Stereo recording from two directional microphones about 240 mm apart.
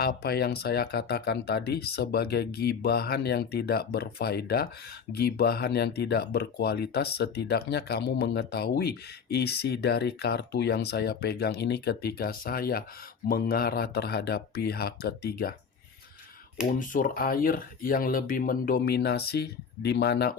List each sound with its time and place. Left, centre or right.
0.0 s speech: left
16.9 s speech: left